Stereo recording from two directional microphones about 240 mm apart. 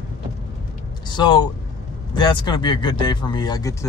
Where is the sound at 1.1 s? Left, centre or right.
Centre.